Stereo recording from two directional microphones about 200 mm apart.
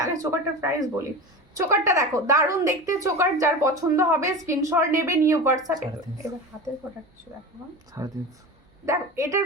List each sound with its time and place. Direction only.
0.0 s a woman's voice: 15° right (ahead or behind)